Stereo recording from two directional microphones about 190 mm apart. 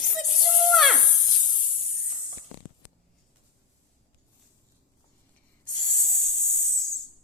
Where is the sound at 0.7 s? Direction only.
Centre (ahead or behind).